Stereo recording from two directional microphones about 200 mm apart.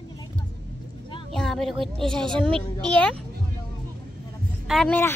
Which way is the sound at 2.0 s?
25° right (ahead or behind).